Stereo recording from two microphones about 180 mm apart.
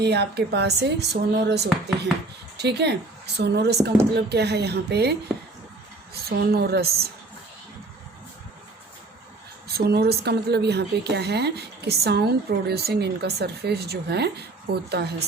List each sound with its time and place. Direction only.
0.0 s speech: 65° right (ahead or behind)
6.1 s speech: 60° right (ahead or behind)
9.6 s speech: 65° right (ahead or behind)